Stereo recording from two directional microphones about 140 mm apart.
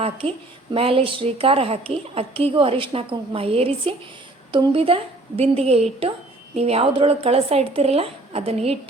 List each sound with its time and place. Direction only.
0.0 s a woman's voice: 45° right (ahead or behind)